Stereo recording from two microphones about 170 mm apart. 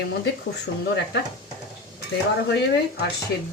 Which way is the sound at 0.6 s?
80° left.